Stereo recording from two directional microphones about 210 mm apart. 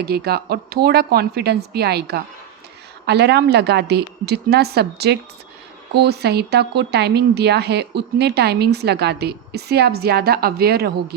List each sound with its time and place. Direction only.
0.0 s speech: 50° right (ahead or behind)